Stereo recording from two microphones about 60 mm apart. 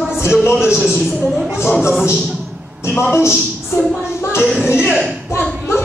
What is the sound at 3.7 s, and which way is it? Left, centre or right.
Speech, left.